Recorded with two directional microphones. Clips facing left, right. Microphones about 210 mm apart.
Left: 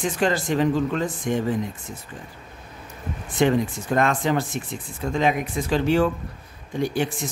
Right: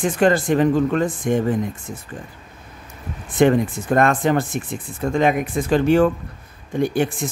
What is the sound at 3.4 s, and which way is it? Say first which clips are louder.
Speech: right 4 dB; 50° right (ahead or behind).